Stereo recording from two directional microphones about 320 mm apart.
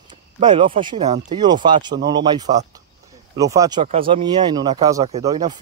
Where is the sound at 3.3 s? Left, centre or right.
Centre.